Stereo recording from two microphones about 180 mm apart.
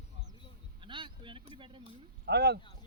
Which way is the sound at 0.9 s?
25° right (ahead or behind).